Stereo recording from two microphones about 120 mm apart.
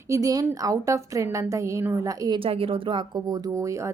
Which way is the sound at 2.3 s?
50° right (ahead or behind).